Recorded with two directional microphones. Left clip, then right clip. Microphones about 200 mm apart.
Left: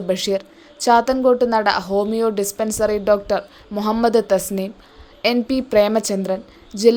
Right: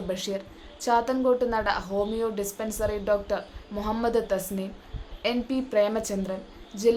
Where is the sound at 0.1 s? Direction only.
40° left (ahead or behind).